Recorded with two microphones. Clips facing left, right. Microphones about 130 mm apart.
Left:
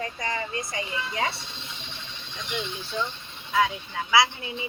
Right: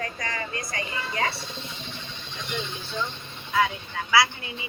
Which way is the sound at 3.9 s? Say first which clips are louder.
Left 1 dB; 10° left (ahead or behind).